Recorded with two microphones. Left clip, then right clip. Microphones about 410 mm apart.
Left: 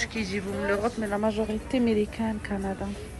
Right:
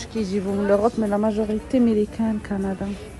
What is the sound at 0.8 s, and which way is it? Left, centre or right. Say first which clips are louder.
Speech: right 6 dB; left.